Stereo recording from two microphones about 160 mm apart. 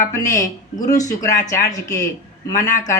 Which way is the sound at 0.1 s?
20° left (ahead or behind).